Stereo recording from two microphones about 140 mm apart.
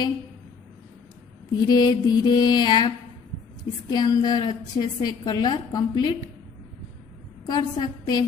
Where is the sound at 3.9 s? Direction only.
30° left (ahead or behind).